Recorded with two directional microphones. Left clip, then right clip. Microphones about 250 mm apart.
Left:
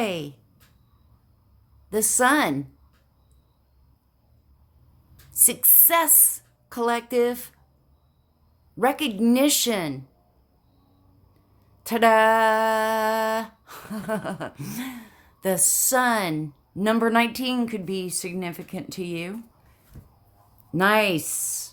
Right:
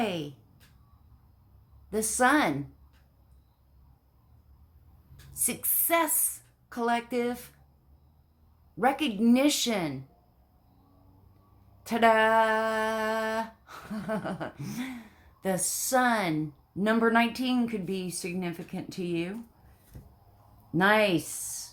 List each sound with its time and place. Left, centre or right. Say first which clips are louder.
0.0 s speech: left 4 dB; left
1.9 s speech: left 4 dB; left
5.3 s speech: left 9 dB; left
8.8 s speech: left 4 dB; left
11.8 s speech: left 5 dB; left
20.7 s speech: left 3 dB; left